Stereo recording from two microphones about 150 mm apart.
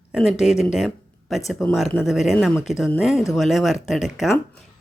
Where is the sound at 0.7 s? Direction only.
Centre (ahead or behind).